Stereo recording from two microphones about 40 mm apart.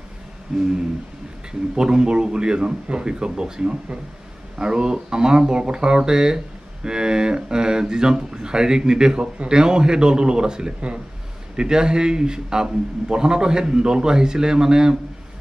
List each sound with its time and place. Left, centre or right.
1.8 s speech: centre